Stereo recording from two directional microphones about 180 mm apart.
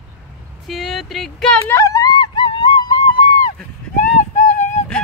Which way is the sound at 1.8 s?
20° left (ahead or behind).